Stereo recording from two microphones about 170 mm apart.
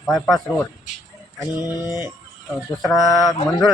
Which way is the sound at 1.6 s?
25° left (ahead or behind).